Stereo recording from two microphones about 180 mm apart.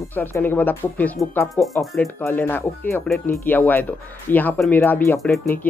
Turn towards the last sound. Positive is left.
turn(degrees=10)  # may be behind; listen again after turning